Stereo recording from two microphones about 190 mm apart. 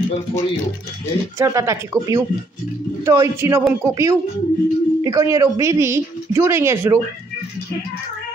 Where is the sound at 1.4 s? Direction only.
15° right (ahead or behind).